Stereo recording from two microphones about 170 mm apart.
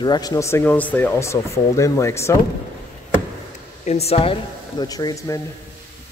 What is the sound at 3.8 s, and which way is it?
Speech, 40° left (ahead or behind).